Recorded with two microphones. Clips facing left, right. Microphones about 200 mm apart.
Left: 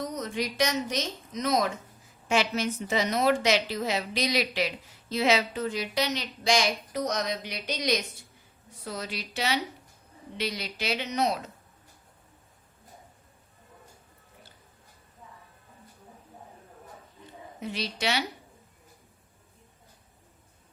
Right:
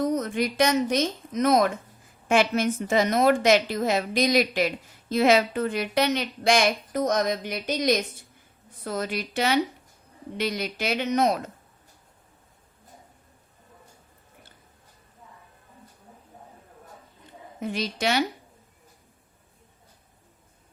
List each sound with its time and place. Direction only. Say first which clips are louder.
0.0 s a woman's voice: right 7 dB; 50° right (ahead or behind)
17.6 s a woman's voice: right 5 dB; 50° right (ahead or behind)